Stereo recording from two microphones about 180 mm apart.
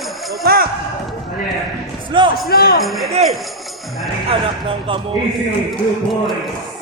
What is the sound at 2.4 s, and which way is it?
Speech, 55° left (ahead or behind).